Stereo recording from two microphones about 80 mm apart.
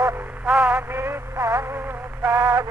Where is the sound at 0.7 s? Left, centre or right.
Right.